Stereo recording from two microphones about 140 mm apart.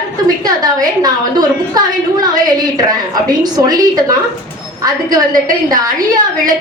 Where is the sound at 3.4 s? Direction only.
30° right (ahead or behind).